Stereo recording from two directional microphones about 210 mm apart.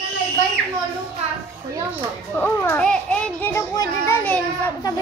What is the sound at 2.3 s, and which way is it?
A child's voice, 10° left (ahead or behind).